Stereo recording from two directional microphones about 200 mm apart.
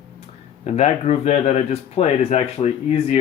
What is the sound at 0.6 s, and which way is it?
Speech, 35° left (ahead or behind).